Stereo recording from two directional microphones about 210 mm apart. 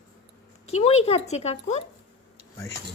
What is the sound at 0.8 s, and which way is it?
A woman's voice, 30° left (ahead or behind).